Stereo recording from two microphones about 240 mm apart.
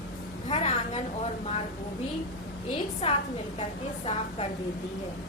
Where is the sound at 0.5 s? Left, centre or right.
Left.